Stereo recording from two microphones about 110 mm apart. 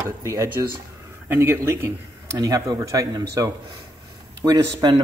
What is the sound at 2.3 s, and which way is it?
Speech, 35° right (ahead or behind).